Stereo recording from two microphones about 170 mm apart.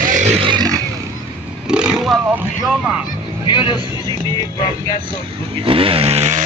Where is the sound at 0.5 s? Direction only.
25° right (ahead or behind).